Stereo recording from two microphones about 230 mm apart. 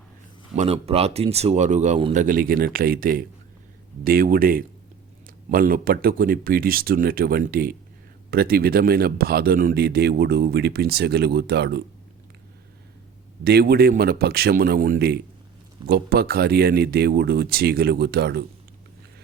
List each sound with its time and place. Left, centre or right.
0.5 s speech: right
2.2 s speech: right
13.4 s speech: right